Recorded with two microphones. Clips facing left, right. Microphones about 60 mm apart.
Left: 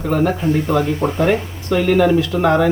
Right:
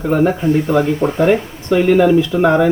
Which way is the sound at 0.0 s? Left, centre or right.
Centre.